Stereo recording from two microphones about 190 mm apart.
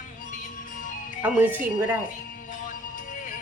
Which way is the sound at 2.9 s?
45° left (ahead or behind).